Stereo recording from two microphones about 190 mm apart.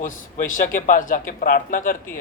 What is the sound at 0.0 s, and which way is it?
Speech, 45° left (ahead or behind).